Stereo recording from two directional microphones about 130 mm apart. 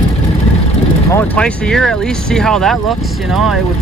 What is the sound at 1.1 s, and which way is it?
Speech, 10° left (ahead or behind).